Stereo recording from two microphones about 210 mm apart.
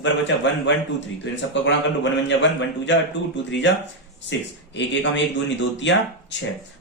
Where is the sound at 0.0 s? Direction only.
60° left (ahead or behind).